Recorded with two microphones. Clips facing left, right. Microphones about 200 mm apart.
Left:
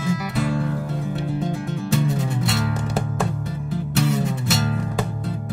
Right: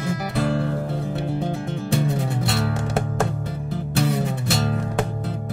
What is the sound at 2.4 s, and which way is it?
Music, 60° right (ahead or behind).